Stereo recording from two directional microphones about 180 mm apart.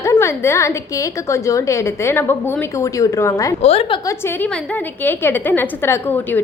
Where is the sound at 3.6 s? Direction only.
35° left (ahead or behind).